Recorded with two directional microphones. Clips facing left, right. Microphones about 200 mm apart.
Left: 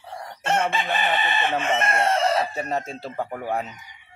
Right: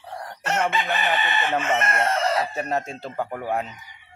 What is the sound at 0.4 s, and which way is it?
Chicken, 30° left (ahead or behind).